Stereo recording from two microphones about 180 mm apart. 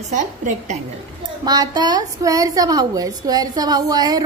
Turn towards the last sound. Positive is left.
turn(degrees=-20)  # may be behind; listen again after turning